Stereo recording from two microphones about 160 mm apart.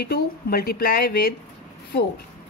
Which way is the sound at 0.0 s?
75° left (ahead or behind).